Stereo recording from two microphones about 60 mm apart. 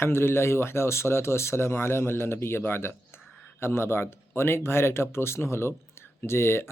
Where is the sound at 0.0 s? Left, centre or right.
Left.